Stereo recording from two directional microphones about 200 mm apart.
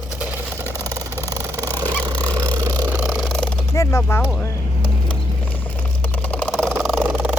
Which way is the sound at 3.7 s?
15° left (ahead or behind).